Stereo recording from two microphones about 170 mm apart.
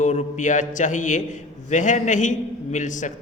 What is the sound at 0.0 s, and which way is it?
A man's voice, 45° left (ahead or behind).